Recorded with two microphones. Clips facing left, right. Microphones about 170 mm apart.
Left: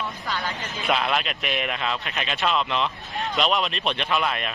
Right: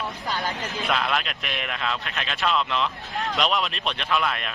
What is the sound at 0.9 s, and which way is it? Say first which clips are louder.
Speech: left 3 dB; centre (ahead or behind).